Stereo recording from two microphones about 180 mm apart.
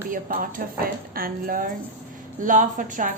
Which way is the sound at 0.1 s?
50° right (ahead or behind).